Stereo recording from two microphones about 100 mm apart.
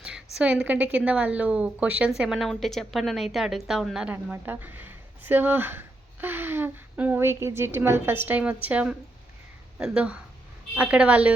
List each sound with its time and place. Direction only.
0.0 s a woman's voice: 10° right (ahead or behind)
4.1 s a woman's voice: 20° right (ahead or behind)